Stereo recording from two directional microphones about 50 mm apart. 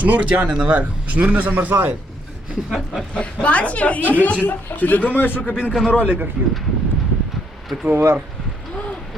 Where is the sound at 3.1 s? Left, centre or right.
Left.